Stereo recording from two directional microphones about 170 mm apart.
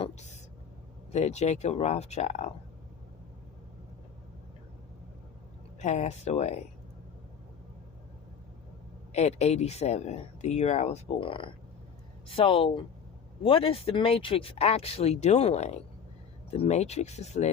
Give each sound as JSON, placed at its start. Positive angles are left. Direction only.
{"t": 0.0, "sound": "a sound", "side_deg": 40}
{"t": 1.1, "sound": "speech", "side_deg": 40}
{"t": 5.8, "sound": "speech", "side_deg": 40}
{"t": 9.1, "sound": "speech", "side_deg": 40}